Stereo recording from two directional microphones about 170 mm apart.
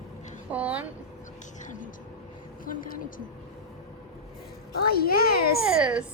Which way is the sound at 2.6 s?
55° left (ahead or behind).